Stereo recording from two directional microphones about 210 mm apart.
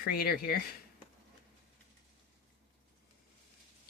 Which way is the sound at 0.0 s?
45° left (ahead or behind).